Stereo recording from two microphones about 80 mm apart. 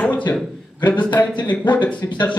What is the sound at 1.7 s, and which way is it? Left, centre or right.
Speech, left.